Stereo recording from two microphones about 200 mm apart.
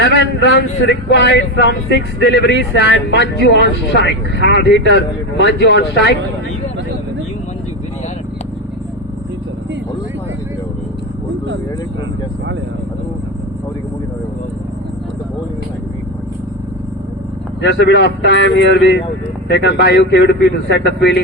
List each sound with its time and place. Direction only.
0.0 s speech: 60° left (ahead or behind)
17.7 s speech: 60° left (ahead or behind)